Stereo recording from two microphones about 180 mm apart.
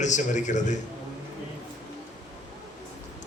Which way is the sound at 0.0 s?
40° left (ahead or behind).